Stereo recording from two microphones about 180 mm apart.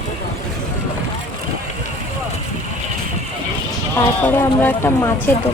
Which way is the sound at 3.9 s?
10° left (ahead or behind).